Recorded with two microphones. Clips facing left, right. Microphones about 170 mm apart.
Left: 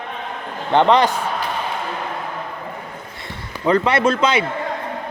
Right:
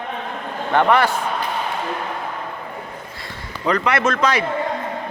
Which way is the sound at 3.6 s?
30° left (ahead or behind).